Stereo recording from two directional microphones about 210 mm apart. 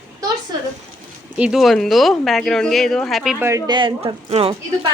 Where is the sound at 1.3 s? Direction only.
5° right (ahead or behind).